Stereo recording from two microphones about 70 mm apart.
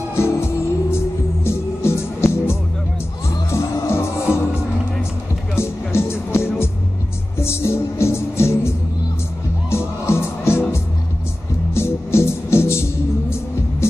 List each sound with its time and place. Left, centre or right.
0.1 s music: left
5.6 s music: left